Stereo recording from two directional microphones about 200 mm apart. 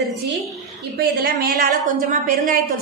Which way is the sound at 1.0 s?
50° right (ahead or behind).